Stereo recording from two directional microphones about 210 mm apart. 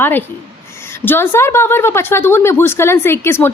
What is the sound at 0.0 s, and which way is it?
A woman's voice, 10° left (ahead or behind).